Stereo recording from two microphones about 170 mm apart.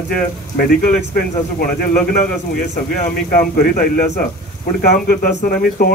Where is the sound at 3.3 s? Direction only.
55° left (ahead or behind).